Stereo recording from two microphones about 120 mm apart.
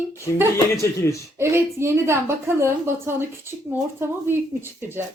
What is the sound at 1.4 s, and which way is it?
A woman's voice, 20° right (ahead or behind).